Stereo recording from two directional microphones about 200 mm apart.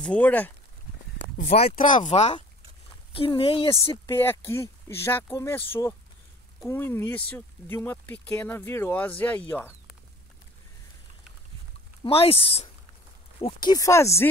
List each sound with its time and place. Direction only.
0.0 s speech: 5° left (ahead or behind)
1.4 s speech: 40° left (ahead or behind)
3.9 s speech: 15° left (ahead or behind)
12.0 s speech: 30° left (ahead or behind)